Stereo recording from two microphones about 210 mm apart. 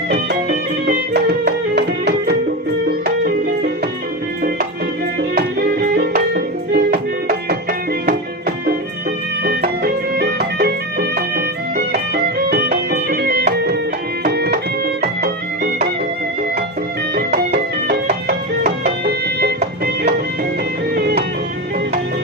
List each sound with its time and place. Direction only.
0.9 s music: 50° right (ahead or behind)
5.4 s music: 50° right (ahead or behind)
12.1 s music: 45° right (ahead or behind)
17.8 s music: 45° right (ahead or behind)